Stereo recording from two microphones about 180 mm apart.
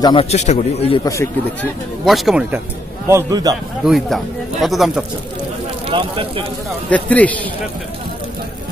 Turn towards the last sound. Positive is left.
turn(degrees=10)  # may be behind; listen again after turning